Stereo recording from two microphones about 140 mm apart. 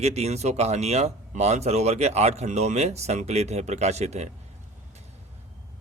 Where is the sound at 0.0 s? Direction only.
50° right (ahead or behind).